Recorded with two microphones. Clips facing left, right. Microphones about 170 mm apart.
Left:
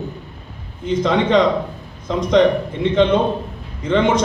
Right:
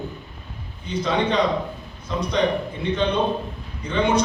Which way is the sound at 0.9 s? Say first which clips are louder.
Left 6 dB; 90° left.